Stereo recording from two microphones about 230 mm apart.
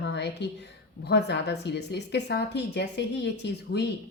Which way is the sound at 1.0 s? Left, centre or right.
Left.